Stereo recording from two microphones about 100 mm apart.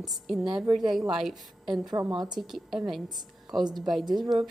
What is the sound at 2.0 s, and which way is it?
Speech, 35° right (ahead or behind).